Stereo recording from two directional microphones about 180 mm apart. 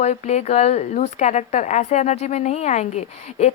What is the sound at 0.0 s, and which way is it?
Speech, 40° left (ahead or behind).